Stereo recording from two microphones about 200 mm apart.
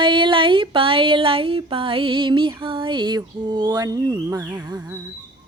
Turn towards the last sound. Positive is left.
turn(degrees=-10)  # may be behind; listen again after turning